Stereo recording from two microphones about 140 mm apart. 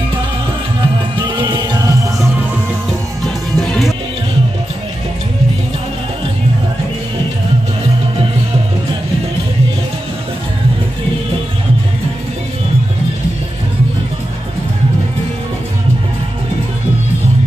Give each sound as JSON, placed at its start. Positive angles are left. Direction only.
{"t": 1.2, "sound": "music", "side_deg": -35}
{"t": 3.3, "sound": "music", "side_deg": 5}